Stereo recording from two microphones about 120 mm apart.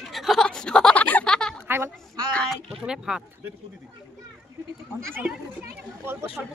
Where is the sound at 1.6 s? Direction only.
20° right (ahead or behind).